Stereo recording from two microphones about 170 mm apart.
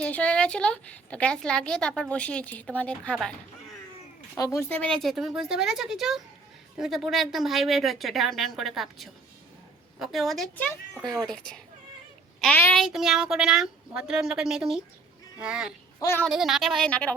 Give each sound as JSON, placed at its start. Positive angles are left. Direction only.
{"t": 0.0, "sound": "a woman's voice", "side_deg": 5}
{"t": 4.4, "sound": "a woman's voice", "side_deg": 20}
{"t": 16.0, "sound": "speech", "side_deg": 15}
{"t": 16.2, "sound": "a woman's voice", "side_deg": 0}